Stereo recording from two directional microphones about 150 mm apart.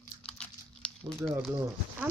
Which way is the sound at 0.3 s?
5° left (ahead or behind).